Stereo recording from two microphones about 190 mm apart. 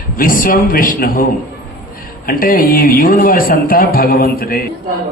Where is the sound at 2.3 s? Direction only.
50° left (ahead or behind).